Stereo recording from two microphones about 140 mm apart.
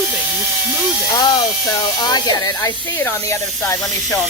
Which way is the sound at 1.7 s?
25° left (ahead or behind).